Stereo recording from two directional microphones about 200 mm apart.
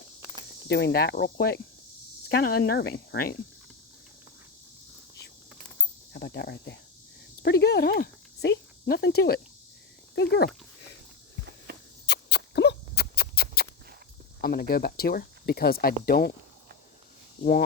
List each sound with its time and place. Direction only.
0.7 s speech: 55° left (ahead or behind)
6.1 s speech: 55° left (ahead or behind)
11.7 s walk: 55° right (ahead or behind)
12.0 s a sound: 55° left (ahead or behind)
14.4 s speech: 50° left (ahead or behind)